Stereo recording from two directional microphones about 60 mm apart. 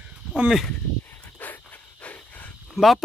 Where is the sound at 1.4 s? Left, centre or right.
Left.